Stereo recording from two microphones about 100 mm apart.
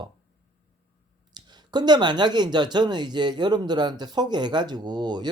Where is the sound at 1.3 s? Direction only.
45° right (ahead or behind).